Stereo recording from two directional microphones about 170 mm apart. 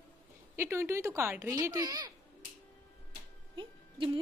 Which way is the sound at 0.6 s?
15° right (ahead or behind).